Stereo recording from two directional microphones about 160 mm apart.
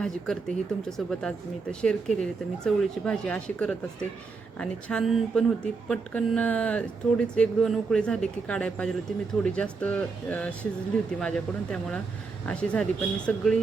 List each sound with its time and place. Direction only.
0.0 s speech: 5° left (ahead or behind)